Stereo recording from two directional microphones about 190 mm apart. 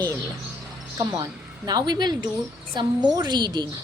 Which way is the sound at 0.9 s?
20° right (ahead or behind).